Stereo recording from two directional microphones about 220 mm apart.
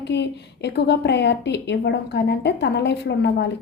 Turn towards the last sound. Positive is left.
turn(degrees=50)  # may be behind; listen again after turning